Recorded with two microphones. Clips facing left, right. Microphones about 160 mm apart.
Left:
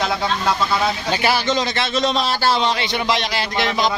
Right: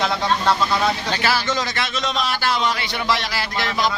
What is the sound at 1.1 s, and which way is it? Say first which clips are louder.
A man's voice: left 3 dB; 20° left (ahead or behind).